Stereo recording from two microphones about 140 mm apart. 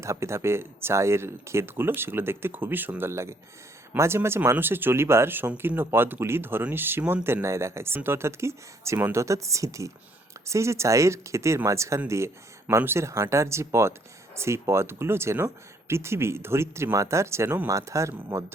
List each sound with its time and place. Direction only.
0.0 s speech: 20° right (ahead or behind)